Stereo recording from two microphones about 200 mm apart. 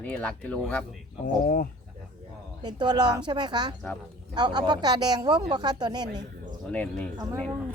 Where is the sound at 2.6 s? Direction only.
20° right (ahead or behind).